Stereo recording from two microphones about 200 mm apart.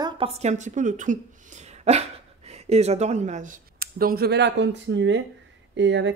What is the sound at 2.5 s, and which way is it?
Speech, 30° right (ahead or behind).